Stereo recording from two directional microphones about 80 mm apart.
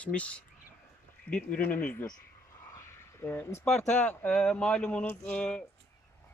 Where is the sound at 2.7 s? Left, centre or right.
Left.